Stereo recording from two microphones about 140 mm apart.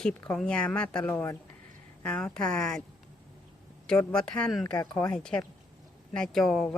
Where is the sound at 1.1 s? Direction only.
20° left (ahead or behind).